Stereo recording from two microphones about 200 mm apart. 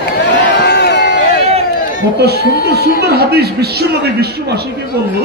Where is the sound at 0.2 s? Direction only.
60° left (ahead or behind).